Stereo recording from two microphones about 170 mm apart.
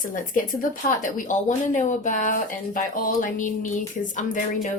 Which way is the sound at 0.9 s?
45° left (ahead or behind).